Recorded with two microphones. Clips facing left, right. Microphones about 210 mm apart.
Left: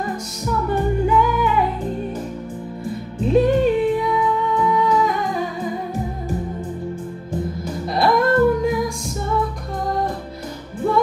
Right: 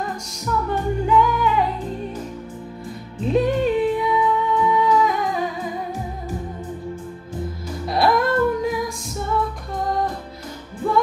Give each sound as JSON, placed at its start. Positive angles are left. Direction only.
{"t": 1.0, "sound": "music", "side_deg": 5}
{"t": 3.2, "sound": "music", "side_deg": 0}
{"t": 7.9, "sound": "music", "side_deg": 0}